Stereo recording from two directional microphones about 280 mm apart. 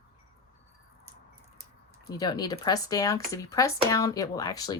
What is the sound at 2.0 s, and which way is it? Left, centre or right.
Speech, centre.